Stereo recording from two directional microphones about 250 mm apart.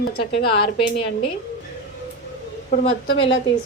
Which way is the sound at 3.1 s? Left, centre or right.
Left.